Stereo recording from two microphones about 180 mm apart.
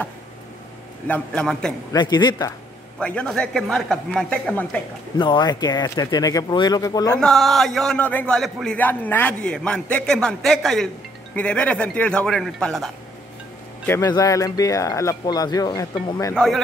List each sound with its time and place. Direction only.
1.0 s a man's voice: 5° left (ahead or behind)
1.9 s speech: 25° left (ahead or behind)
3.0 s a man's voice: 5° left (ahead or behind)
5.1 s speech: 25° left (ahead or behind)
7.2 s a man's voice: centre (ahead or behind)
13.8 s speech: 20° left (ahead or behind)
16.3 s a man's voice: centre (ahead or behind)